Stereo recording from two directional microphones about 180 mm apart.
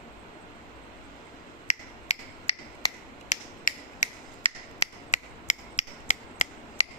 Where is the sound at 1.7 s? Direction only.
40° left (ahead or behind).